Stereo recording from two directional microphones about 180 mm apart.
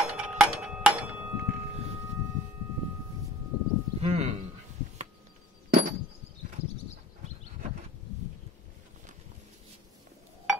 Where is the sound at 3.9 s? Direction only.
35° right (ahead or behind).